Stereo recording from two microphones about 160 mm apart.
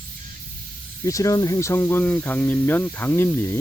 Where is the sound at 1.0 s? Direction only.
20° left (ahead or behind).